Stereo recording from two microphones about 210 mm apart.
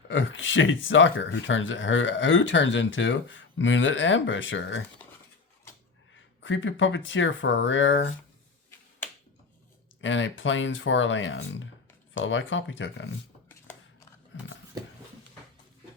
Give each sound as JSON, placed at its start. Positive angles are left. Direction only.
{"t": 0.1, "sound": "speech", "side_deg": 65}
{"t": 6.4, "sound": "speech", "side_deg": 65}
{"t": 10.0, "sound": "speech", "side_deg": 65}
{"t": 13.5, "sound": "shuffling cards", "side_deg": 10}
{"t": 14.3, "sound": "a sound", "side_deg": 65}